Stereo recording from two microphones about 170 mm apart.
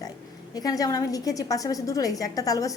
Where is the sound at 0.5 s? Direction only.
20° left (ahead or behind).